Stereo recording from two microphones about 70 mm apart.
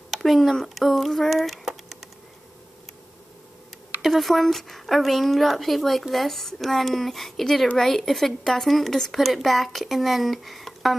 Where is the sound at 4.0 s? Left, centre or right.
Centre.